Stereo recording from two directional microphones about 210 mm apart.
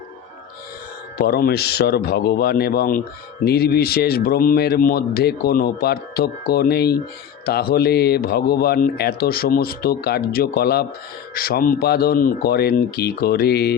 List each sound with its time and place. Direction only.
1.2 s speech: 45° left (ahead or behind)